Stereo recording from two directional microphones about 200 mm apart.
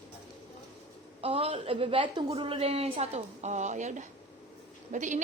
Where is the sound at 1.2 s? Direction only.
30° right (ahead or behind).